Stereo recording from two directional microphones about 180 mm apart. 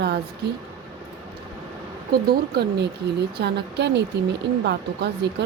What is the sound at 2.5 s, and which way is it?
Speech, 65° right (ahead or behind).